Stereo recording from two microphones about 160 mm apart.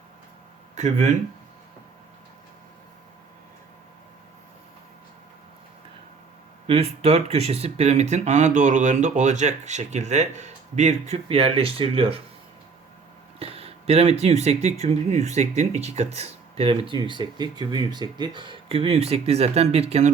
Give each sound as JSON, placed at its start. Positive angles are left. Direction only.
{"t": 0.8, "sound": "speech", "side_deg": -50}
{"t": 6.7, "sound": "speech", "side_deg": -40}
{"t": 13.4, "sound": "speech", "side_deg": -35}